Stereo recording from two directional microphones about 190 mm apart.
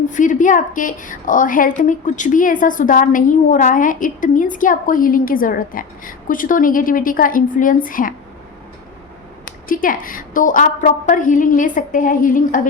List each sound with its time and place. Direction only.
0.1 s a woman's voice: 40° left (ahead or behind)
9.6 s a woman's voice: 45° left (ahead or behind)